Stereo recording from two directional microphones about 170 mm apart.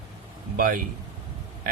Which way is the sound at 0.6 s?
55° right (ahead or behind).